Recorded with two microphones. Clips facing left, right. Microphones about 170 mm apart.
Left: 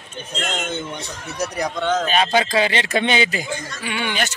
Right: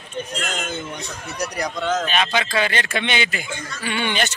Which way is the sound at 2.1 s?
35° left (ahead or behind).